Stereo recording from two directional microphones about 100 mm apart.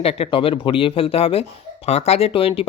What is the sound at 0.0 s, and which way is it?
Speech, 80° left.